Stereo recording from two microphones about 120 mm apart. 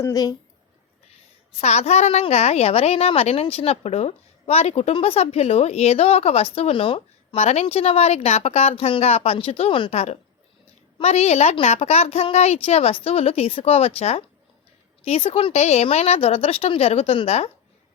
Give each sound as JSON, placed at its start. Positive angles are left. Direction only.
{"t": 0.0, "sound": "speech", "side_deg": 30}
{"t": 1.6, "sound": "a woman's voice", "side_deg": 65}